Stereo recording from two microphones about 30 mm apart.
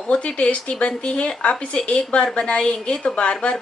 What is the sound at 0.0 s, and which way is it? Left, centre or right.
A woman's voice, left.